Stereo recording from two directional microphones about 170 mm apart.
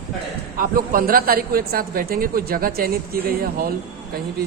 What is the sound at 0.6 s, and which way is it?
A man's voice, 60° right (ahead or behind).